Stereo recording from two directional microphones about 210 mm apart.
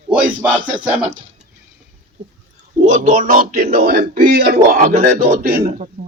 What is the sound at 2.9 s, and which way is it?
A man's voice, 35° right (ahead or behind).